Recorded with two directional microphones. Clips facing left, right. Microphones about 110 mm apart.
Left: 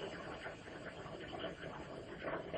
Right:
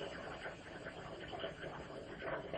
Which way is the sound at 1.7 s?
15° right (ahead or behind).